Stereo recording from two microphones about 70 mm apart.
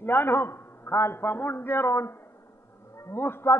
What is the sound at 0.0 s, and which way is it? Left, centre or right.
A man's voice, left.